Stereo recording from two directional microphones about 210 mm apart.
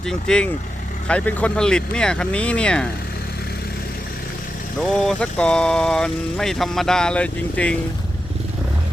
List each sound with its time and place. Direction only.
0.0 s speech: 5° left (ahead or behind)
4.8 s speech: centre (ahead or behind)